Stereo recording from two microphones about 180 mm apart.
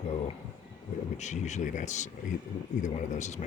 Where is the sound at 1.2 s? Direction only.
40° left (ahead or behind).